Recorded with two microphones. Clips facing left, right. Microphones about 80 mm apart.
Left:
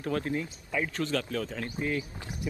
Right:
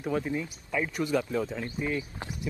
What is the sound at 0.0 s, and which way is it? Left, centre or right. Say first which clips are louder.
A man's voice: right 1 dB; centre.